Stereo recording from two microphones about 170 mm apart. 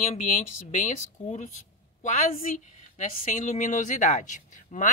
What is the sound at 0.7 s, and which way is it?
Speech, 45° left (ahead or behind).